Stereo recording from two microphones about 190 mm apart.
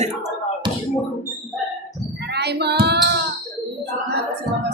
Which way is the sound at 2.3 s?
60° right (ahead or behind).